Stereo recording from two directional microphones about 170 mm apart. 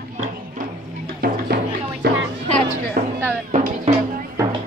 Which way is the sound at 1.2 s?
60° right (ahead or behind).